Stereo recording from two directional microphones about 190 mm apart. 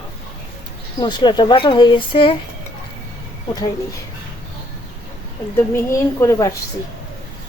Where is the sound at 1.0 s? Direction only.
25° left (ahead or behind).